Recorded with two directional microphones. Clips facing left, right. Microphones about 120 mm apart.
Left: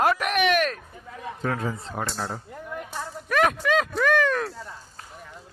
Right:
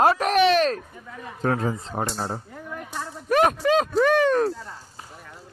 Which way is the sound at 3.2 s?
35° right (ahead or behind).